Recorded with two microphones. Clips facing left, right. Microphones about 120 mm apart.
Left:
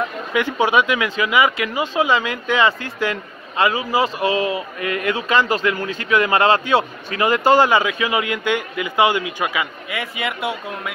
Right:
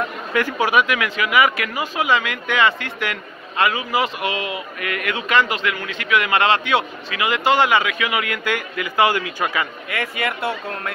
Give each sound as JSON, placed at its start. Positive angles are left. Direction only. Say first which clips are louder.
{"t": 0.3, "sound": "speech", "louder": "left 1 dB", "side_deg": 20}